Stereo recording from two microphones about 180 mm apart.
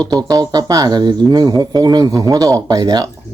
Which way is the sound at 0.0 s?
20° right (ahead or behind).